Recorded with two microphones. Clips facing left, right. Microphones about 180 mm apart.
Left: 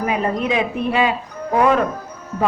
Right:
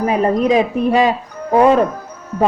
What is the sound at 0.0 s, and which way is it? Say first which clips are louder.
Speech: right 5 dB; 40° right (ahead or behind).